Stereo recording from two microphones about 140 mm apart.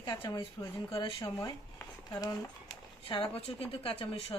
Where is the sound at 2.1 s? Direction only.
25° left (ahead or behind).